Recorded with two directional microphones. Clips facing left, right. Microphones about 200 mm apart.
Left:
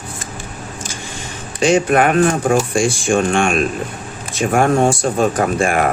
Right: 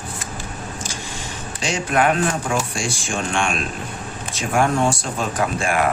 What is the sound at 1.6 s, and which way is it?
Speech, 55° left (ahead or behind).